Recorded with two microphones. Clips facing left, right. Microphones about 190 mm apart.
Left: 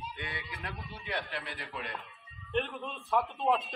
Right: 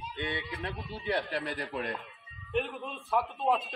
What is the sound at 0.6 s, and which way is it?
A man's voice, 35° right (ahead or behind).